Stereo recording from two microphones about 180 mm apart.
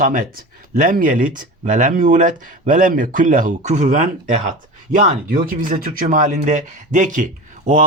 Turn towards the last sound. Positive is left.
turn(degrees=-45)  # may be behind; listen again after turning